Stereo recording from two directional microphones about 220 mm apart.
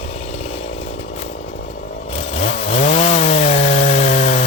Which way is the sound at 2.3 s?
25° left (ahead or behind).